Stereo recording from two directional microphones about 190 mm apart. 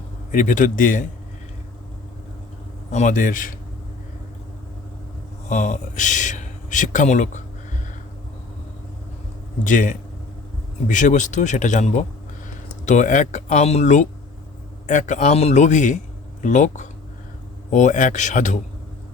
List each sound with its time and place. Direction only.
0.3 s a man's voice: 45° left (ahead or behind)
2.9 s a man's voice: 40° left (ahead or behind)
5.5 s speech: 40° left (ahead or behind)
9.6 s a man's voice: 40° left (ahead or behind)